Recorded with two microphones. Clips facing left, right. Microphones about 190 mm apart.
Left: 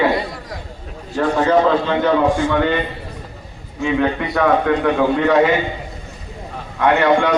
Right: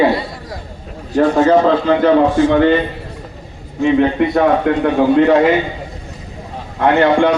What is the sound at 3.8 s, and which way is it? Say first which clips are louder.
A man's voice: right 6 dB; 30° right (ahead or behind).